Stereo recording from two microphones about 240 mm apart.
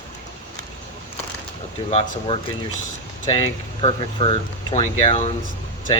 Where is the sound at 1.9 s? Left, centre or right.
Left.